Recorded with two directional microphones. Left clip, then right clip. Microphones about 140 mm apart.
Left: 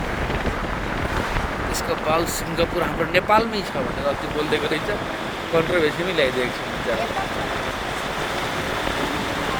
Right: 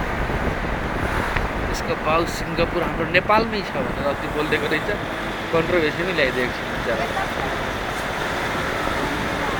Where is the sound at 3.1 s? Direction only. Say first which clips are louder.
Even; 20° left (ahead or behind).